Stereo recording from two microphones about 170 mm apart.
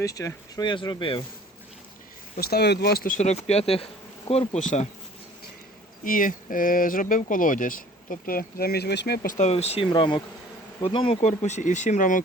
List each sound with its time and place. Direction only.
0.0 s speech: 20° left (ahead or behind)
2.3 s speech: 65° left (ahead or behind); by 4.9 s 40° left (ahead or behind)
6.1 s speech: 55° left (ahead or behind); by 9.3 s 70° left (ahead or behind)
9.4 s speech: 40° left (ahead or behind)